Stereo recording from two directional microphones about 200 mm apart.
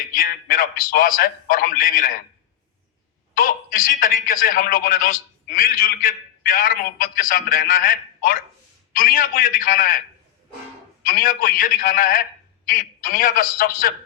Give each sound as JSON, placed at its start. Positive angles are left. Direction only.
{"t": 0.2, "sound": "a man's voice", "side_deg": 45}
{"t": 3.3, "sound": "a man's voice", "side_deg": 45}
{"t": 11.0, "sound": "a man's voice", "side_deg": 45}